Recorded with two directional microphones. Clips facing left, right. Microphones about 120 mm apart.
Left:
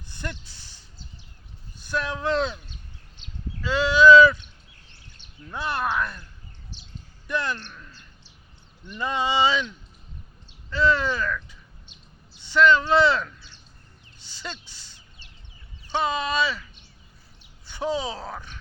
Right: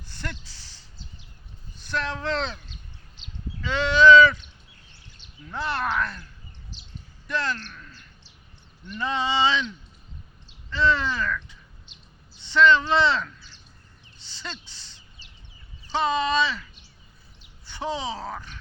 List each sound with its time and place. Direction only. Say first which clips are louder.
0.1 s speech: left 1 dB; 15° left (ahead or behind)
1.9 s speech: left 2 dB; 10° left (ahead or behind)
3.6 s speech: left 1 dB; 5° left (ahead or behind)
5.5 s speech: even; 10° left (ahead or behind)
7.3 s speech: even; 15° left (ahead or behind)
14.3 s a sound: left 1 dB; 10° left (ahead or behind)
15.9 s speech: right 2 dB; 10° left (ahead or behind)
17.7 s speech: left 2 dB; 10° left (ahead or behind)